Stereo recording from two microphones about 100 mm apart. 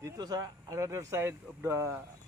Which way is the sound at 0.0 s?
40° right (ahead or behind).